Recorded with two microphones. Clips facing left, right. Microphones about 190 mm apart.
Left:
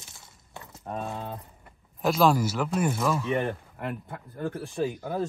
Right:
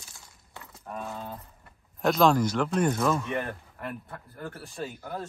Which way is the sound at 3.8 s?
20° left (ahead or behind).